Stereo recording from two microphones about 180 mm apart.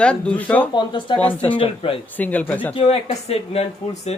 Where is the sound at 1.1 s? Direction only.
10° left (ahead or behind).